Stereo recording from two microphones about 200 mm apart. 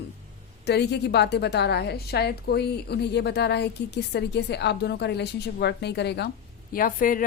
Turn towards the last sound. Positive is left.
turn(degrees=45)  # may be behind; listen again after turning